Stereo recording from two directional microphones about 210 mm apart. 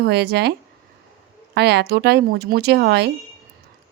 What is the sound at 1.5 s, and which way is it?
Speech, 50° right (ahead or behind).